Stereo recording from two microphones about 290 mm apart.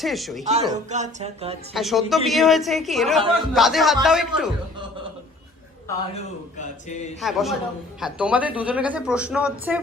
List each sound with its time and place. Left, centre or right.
0.0 s a woman's voice: centre
0.7 s music: right
1.7 s a woman's voice: centre
6.6 s speech: left
7.2 s a woman's voice: centre